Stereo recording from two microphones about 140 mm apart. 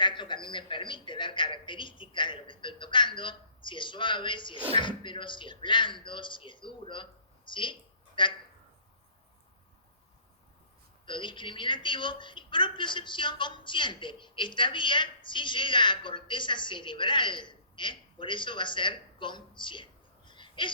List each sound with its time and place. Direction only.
0.0 s a woman's voice: 35° left (ahead or behind)
11.0 s a woman's voice: 35° left (ahead or behind)